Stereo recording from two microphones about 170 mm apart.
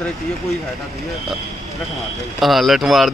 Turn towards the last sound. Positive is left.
turn(degrees=0)  # may be behind; listen again after turning